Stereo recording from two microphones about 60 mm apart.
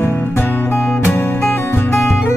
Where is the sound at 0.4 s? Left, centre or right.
Left.